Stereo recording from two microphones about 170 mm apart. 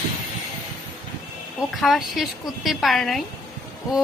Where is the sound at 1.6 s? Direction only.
Centre (ahead or behind).